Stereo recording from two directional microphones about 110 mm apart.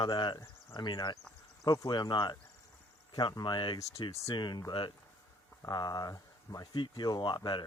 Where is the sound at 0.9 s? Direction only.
30° left (ahead or behind).